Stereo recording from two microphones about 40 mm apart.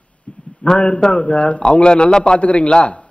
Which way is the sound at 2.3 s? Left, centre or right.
Left.